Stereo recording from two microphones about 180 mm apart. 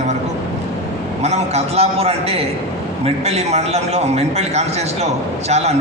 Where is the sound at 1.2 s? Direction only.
35° right (ahead or behind).